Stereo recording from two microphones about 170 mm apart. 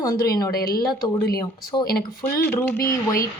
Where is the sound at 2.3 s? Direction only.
10° left (ahead or behind).